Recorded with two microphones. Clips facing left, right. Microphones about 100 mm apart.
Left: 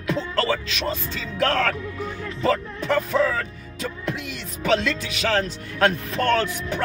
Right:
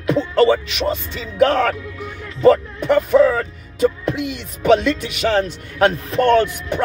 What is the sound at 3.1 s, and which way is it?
Speech, 20° right (ahead or behind).